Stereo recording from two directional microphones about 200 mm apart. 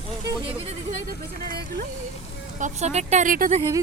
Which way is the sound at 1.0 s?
45° right (ahead or behind).